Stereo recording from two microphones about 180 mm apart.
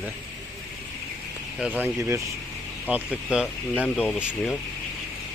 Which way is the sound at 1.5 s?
5° right (ahead or behind).